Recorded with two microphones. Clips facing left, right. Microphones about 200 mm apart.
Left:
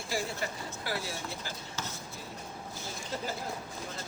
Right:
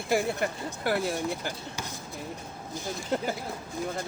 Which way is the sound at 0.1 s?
60° right (ahead or behind).